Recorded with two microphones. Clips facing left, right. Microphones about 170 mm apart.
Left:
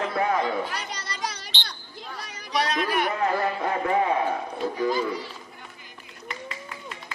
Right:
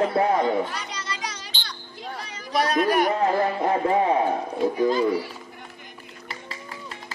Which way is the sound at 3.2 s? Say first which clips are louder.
Right 3 dB; 30° right (ahead or behind).